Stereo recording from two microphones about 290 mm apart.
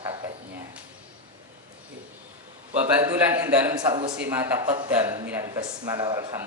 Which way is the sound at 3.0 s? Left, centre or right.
Centre.